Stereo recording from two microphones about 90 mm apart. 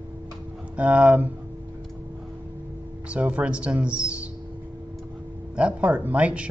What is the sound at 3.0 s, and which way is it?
Speech, 15° right (ahead or behind).